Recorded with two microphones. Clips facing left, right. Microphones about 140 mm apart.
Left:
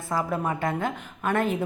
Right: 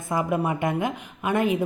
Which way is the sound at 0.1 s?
15° right (ahead or behind).